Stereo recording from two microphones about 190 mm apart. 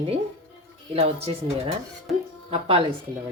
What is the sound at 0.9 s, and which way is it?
Speech, 30° right (ahead or behind).